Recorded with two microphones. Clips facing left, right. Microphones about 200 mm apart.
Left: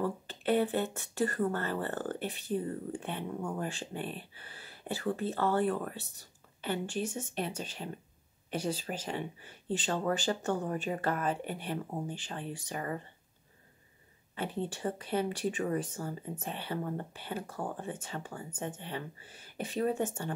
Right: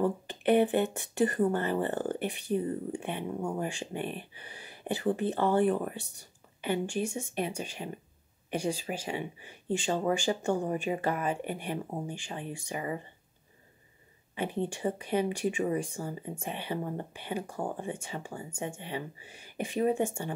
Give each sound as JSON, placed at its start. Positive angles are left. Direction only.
{"t": 0.0, "sound": "speech", "side_deg": -15}
{"t": 14.3, "sound": "speech", "side_deg": -15}